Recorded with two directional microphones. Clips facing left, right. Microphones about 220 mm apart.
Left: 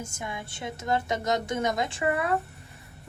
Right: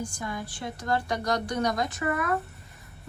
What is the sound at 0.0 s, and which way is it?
A woman's voice, 25° left (ahead or behind).